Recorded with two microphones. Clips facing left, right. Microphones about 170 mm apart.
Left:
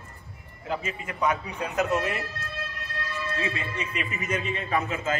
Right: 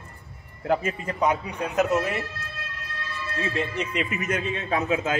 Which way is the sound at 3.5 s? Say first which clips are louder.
Right 5 dB; 70° right (ahead or behind).